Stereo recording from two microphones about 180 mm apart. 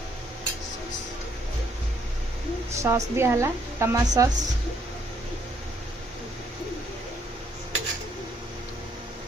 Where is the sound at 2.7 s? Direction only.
15° right (ahead or behind).